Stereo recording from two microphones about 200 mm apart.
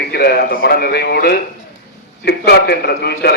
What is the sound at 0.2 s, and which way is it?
A man's voice, 50° left (ahead or behind).